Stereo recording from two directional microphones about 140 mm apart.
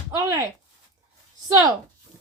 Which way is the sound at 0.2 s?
25° right (ahead or behind).